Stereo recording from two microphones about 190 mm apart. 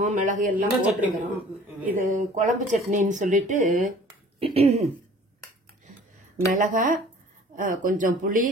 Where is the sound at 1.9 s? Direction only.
40° right (ahead or behind).